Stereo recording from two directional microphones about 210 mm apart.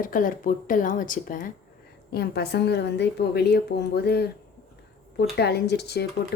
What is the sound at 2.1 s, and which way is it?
Speech, 50° left (ahead or behind).